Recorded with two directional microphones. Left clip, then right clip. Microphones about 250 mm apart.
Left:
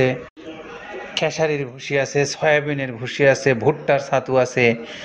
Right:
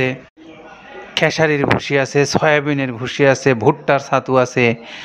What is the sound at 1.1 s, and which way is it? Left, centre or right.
Speech, right.